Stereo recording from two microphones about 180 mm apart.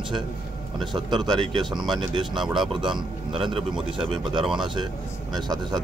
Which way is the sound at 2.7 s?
25° right (ahead or behind).